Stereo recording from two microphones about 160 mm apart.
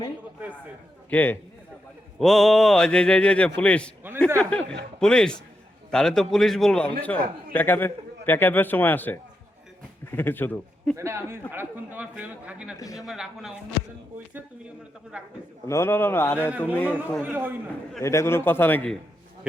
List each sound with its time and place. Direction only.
1.1 s a man's voice: 10° left (ahead or behind)
10.9 s a man's voice: 15° right (ahead or behind)
12.8 s a man's voice: 20° left (ahead or behind)
13.1 s speech: centre (ahead or behind)
15.1 s a man's voice: 5° right (ahead or behind)
15.6 s a man's voice: 15° left (ahead or behind)
16.5 s a man's voice: 10° right (ahead or behind)
16.7 s a man's voice: 10° left (ahead or behind)
17.2 s a man's voice: 10° right (ahead or behind)
18.0 s a man's voice: 20° left (ahead or behind)